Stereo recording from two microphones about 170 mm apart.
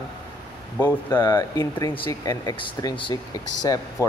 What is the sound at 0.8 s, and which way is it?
Speech, 15° left (ahead or behind).